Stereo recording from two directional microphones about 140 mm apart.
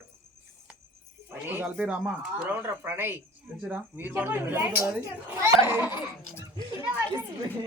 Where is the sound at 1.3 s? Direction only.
15° right (ahead or behind).